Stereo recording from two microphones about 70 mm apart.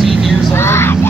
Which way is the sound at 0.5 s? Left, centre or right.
Left.